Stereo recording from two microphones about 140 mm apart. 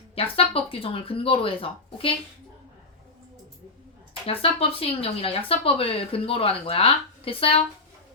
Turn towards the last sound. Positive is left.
turn(degrees=40)  # may be behind; listen again after turning